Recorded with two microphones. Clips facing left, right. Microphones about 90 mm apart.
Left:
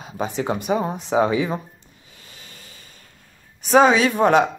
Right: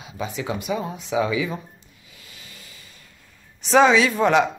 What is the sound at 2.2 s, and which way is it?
Vehicle, 40° left (ahead or behind).